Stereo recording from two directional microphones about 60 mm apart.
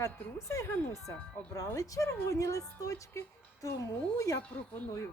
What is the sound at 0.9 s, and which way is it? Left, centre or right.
A woman's voice, left.